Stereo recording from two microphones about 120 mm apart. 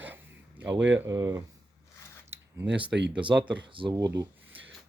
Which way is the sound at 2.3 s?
20° right (ahead or behind).